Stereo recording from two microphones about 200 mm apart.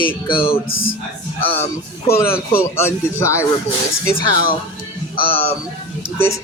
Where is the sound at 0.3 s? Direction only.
25° left (ahead or behind).